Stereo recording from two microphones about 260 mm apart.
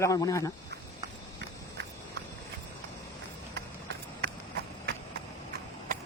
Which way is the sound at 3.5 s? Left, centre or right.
Right.